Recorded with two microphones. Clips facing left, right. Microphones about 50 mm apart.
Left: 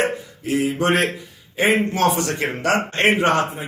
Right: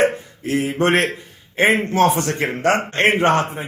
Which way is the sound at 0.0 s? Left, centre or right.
Right.